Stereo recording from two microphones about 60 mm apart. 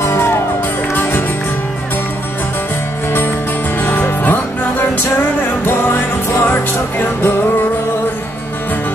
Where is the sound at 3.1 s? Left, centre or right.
Left.